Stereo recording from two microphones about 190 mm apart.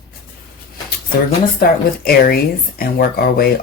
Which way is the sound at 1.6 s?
50° left (ahead or behind).